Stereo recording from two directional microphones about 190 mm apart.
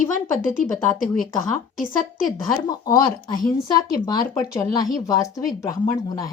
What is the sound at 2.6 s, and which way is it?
Speech, 20° left (ahead or behind).